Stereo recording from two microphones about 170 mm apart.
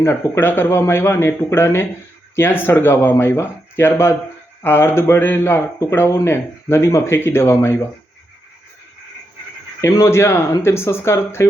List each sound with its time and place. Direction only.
0.0 s speech: 15° left (ahead or behind)
9.8 s speech: 15° left (ahead or behind)